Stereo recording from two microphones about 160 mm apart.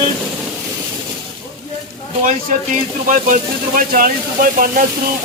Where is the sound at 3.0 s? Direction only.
55° right (ahead or behind).